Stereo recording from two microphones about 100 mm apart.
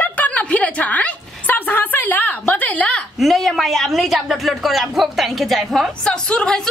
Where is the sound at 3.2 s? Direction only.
Centre (ahead or behind).